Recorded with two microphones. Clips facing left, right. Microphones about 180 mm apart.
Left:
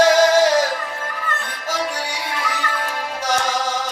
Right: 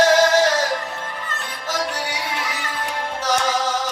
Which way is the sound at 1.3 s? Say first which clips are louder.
Left 5 dB; 55° left (ahead or behind).